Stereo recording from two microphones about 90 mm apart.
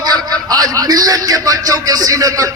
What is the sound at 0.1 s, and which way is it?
A man's voice, 45° right (ahead or behind).